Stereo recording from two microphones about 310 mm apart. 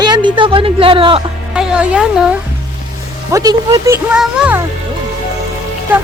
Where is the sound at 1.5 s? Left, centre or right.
Centre.